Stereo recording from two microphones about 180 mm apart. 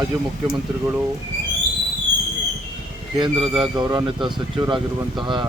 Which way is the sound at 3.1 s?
25° right (ahead or behind).